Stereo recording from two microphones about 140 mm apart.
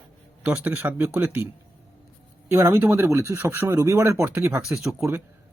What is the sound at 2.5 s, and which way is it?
Speech, 15° right (ahead or behind).